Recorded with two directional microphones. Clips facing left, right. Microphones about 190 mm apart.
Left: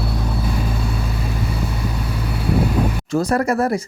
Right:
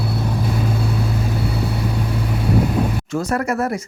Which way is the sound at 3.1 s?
35° left (ahead or behind).